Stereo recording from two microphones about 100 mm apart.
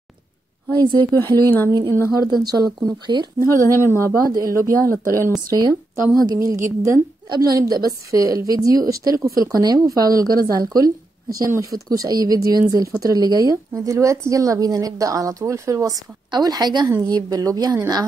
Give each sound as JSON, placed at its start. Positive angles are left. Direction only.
{"t": 0.7, "sound": "a woman's voice", "side_deg": -50}
{"t": 1.2, "sound": "speech", "side_deg": 20}
{"t": 1.7, "sound": "a woman's voice", "side_deg": -40}
{"t": 4.0, "sound": "a woman's voice", "side_deg": -35}
{"t": 7.2, "sound": "a woman's voice", "side_deg": -45}